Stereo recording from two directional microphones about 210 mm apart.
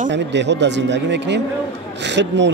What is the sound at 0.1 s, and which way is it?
Speech, 55° right (ahead or behind).